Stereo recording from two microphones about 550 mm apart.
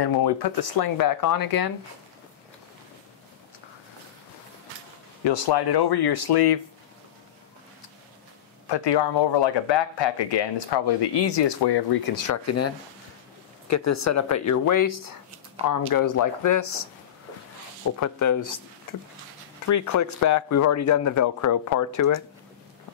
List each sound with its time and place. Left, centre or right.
0.0 s speech: left
5.2 s speech: left
8.6 s speech: left
12.3 s speech: left
18.0 s speech: left
19.7 s speech: left